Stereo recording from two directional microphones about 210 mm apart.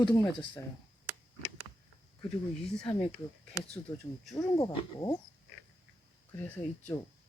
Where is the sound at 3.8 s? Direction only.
10° left (ahead or behind).